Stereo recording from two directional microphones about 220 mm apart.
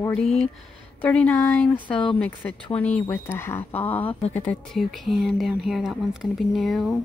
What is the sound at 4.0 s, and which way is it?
Speech, 25° left (ahead or behind).